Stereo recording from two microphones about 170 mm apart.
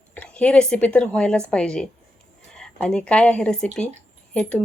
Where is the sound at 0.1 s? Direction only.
5° left (ahead or behind).